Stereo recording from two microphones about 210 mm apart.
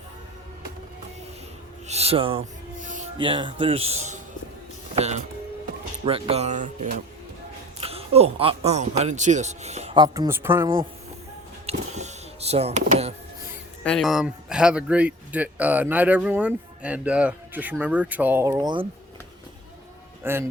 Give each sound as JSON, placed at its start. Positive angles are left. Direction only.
{"t": 1.9, "sound": "a man's voice", "side_deg": -30}
{"t": 2.8, "sound": "music", "side_deg": -35}
{"t": 3.2, "sound": "a man's voice", "side_deg": -25}
{"t": 11.6, "sound": "a sound", "side_deg": -30}
{"t": 13.8, "sound": "speech", "side_deg": 0}
{"t": 20.2, "sound": "speech", "side_deg": -10}